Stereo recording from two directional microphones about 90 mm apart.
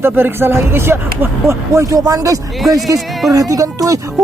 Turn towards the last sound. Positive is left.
turn(degrees=-40)  # may be behind; listen again after turning